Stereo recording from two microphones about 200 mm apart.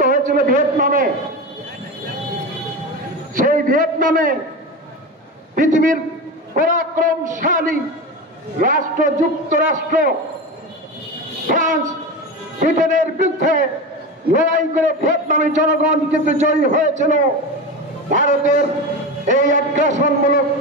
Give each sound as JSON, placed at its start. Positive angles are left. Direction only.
{"t": 0.0, "sound": "a man's voice", "side_deg": -40}
{"t": 3.3, "sound": "a man's voice", "side_deg": -45}
{"t": 5.6, "sound": "a man's voice", "side_deg": -40}
{"t": 11.4, "sound": "a man's voice", "side_deg": -40}